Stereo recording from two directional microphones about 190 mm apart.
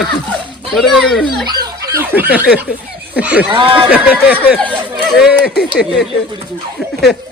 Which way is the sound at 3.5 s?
25° right (ahead or behind).